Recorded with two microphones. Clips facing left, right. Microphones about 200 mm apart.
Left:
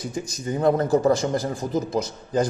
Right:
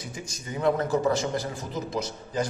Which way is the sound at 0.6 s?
35° left (ahead or behind).